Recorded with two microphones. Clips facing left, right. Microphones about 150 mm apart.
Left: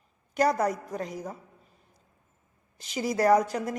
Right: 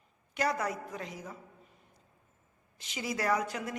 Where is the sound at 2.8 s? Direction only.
40° left (ahead or behind).